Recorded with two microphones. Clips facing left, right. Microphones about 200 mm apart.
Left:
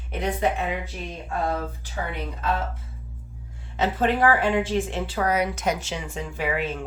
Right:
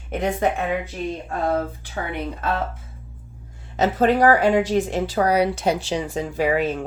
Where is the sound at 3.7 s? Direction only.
40° right (ahead or behind).